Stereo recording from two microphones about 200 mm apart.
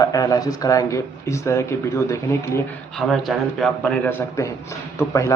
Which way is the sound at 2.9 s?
Centre (ahead or behind).